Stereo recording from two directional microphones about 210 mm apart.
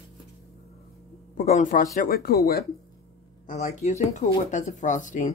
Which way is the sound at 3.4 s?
35° left (ahead or behind).